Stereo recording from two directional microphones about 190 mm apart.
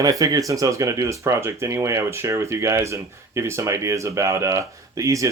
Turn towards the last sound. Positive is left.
turn(degrees=-15)  # may be behind; listen again after turning